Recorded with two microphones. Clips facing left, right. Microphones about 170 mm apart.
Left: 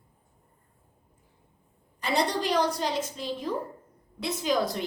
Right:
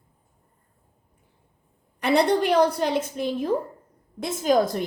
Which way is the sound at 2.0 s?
60° right (ahead or behind).